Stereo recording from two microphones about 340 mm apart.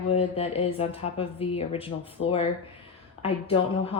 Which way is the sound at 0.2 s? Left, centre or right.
Centre.